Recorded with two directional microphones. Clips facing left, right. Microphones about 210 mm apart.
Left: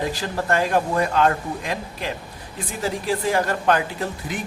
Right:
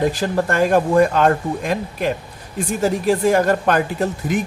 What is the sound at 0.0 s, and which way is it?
Speech, 50° right (ahead or behind).